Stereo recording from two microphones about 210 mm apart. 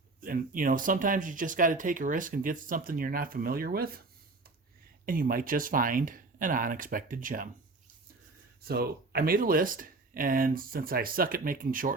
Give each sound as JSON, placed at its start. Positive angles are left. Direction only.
{"t": 0.2, "sound": "speech", "side_deg": -40}
{"t": 5.0, "sound": "speech", "side_deg": -40}
{"t": 8.6, "sound": "speech", "side_deg": -45}